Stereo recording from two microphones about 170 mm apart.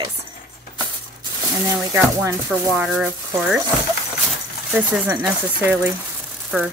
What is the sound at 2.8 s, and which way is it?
Speech, centre (ahead or behind).